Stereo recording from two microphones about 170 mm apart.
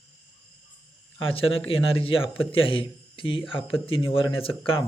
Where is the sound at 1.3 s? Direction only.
35° left (ahead or behind).